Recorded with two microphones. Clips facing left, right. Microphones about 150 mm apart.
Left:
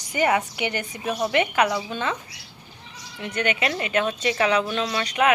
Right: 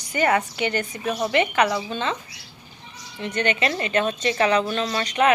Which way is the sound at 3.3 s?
10° left (ahead or behind).